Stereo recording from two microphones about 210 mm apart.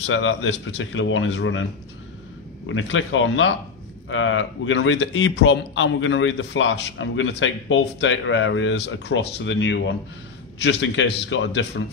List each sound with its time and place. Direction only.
0.0 s a man's voice: 65° left (ahead or behind)
2.7 s a man's voice: 65° left (ahead or behind)